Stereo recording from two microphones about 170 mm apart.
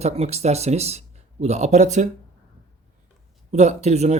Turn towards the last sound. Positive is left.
turn(degrees=-40)  # may be behind; listen again after turning